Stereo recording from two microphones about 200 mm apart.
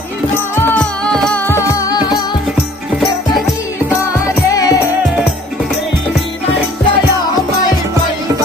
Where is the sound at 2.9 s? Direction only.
Centre (ahead or behind).